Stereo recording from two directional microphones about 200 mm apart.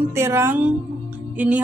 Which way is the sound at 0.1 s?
10° right (ahead or behind).